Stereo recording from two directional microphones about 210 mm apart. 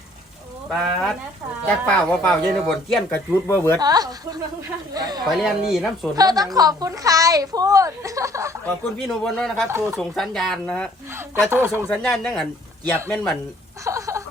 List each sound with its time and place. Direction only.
0.7 s speech: centre (ahead or behind)
3.8 s speech: 20° right (ahead or behind)
5.3 s speech: centre (ahead or behind)
6.1 s a woman's voice: 20° right (ahead or behind)
8.6 s speech: centre (ahead or behind)
9.6 s a woman's voice: 15° right (ahead or behind)
10.0 s speech: centre (ahead or behind)
11.3 s a woman's voice: 10° right (ahead or behind)
11.9 s speech: centre (ahead or behind)
13.8 s a sound: 15° right (ahead or behind)